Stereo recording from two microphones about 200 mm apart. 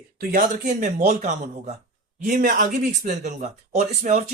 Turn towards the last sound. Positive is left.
turn(degrees=-35)  # may be behind; listen again after turning